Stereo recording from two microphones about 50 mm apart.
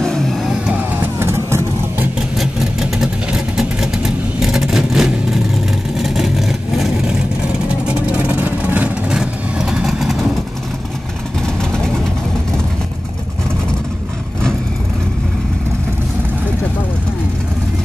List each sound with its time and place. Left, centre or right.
0.0 s vehicle: centre
0.4 s vehicle: centre
1.2 s vehicle: right
2.3 s vehicle: centre
7.8 s vehicle: right
9.1 s vehicle: centre
11.4 s vehicle: centre